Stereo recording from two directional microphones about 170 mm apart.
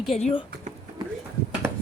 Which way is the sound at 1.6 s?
10° right (ahead or behind).